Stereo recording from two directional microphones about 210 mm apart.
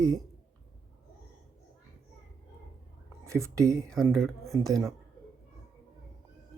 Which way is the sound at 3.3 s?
15° right (ahead or behind).